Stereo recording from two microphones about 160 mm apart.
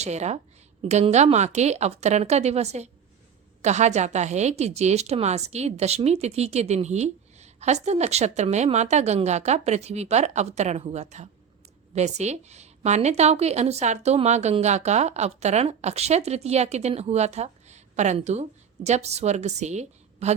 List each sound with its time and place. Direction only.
0.0 s a woman's voice: 45° right (ahead or behind)